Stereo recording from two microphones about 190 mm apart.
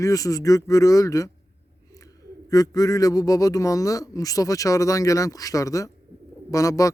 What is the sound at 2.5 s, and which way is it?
A man's voice, 20° left (ahead or behind).